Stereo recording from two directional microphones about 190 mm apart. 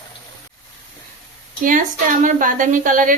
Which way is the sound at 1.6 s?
45° right (ahead or behind).